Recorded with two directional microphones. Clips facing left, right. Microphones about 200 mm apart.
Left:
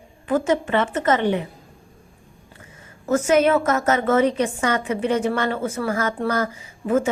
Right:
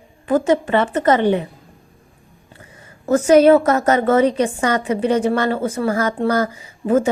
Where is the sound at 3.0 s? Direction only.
35° right (ahead or behind).